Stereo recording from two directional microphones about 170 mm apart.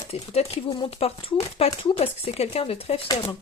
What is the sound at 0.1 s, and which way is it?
Speech, 35° left (ahead or behind).